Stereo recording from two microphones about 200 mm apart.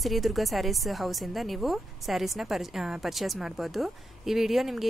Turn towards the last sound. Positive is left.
turn(degrees=0)  # may be behind; listen again after turning